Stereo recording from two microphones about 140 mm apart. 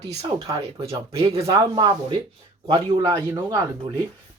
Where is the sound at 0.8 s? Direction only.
45° right (ahead or behind).